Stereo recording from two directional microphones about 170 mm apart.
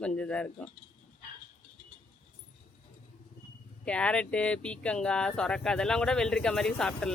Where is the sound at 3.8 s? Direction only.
5° left (ahead or behind).